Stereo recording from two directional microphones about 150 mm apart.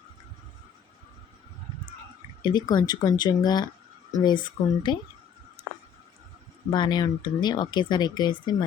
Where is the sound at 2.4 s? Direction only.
30° left (ahead or behind).